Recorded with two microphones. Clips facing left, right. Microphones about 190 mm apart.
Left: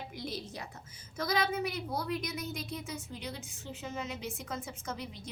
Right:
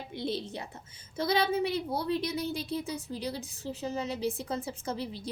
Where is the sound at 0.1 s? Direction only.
25° right (ahead or behind).